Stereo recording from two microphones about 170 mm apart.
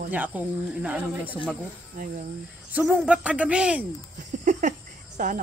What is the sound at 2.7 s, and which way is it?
Speech, 5° right (ahead or behind).